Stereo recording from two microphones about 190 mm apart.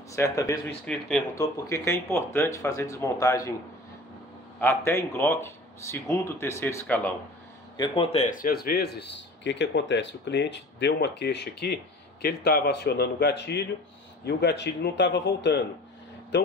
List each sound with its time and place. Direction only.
0.1 s speech: 15° left (ahead or behind)
0.8 s speech: 5° left (ahead or behind)
1.3 s speech: 15° left (ahead or behind)
4.6 s speech: 10° left (ahead or behind)
7.7 s a man's voice: 25° left (ahead or behind); by 16.5 s 65° left (ahead or behind)